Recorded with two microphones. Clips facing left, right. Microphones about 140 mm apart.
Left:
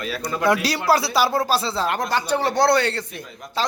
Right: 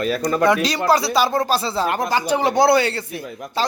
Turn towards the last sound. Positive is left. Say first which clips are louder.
# right 2 dB
turn(degrees=-5)  # may be behind; listen again after turning